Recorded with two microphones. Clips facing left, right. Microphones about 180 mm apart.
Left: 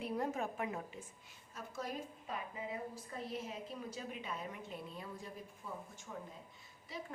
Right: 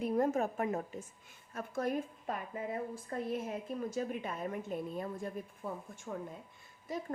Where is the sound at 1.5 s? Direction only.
55° right (ahead or behind).